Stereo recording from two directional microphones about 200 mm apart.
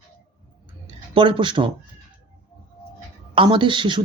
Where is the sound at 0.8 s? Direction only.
25° right (ahead or behind).